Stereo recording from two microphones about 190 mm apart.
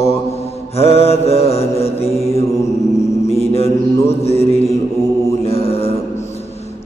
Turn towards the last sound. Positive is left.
turn(degrees=30)  # may be behind; listen again after turning